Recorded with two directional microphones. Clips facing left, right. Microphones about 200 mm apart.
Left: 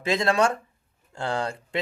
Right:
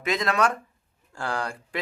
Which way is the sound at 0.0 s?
30° left (ahead or behind).